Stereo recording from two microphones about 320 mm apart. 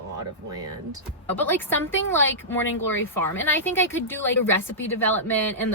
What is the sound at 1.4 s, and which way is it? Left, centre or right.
Speech, centre.